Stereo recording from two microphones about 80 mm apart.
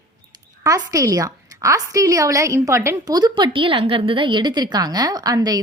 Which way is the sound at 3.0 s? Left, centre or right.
Right.